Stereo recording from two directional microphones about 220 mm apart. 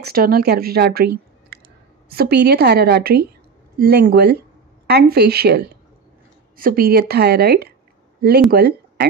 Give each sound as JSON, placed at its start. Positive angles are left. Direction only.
{"t": 0.0, "sound": "a woman's voice", "side_deg": -40}